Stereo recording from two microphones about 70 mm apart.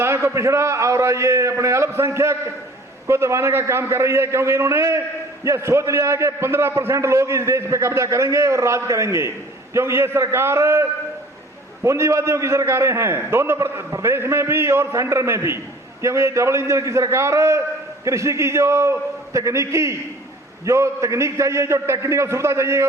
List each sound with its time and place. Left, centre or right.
0.0 s a man's voice: right